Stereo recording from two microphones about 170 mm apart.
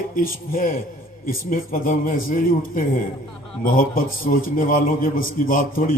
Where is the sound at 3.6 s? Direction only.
55° left (ahead or behind).